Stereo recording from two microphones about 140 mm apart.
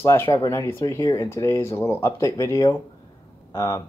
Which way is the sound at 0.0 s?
20° left (ahead or behind).